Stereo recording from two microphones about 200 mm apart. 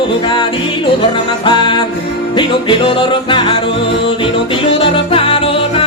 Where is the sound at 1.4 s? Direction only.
25° left (ahead or behind).